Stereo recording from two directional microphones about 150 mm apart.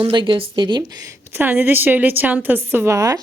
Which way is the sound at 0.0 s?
35° right (ahead or behind).